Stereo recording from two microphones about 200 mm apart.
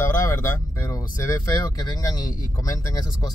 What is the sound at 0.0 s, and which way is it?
Speech, 15° left (ahead or behind).